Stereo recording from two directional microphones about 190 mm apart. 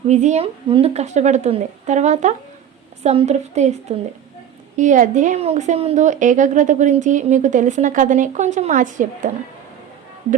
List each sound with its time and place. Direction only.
0.1 s a woman's voice: 40° right (ahead or behind)